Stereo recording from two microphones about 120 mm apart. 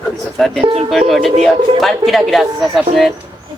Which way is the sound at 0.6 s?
55° right (ahead or behind).